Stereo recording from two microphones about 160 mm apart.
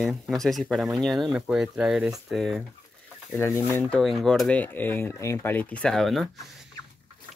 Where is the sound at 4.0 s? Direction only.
Centre (ahead or behind).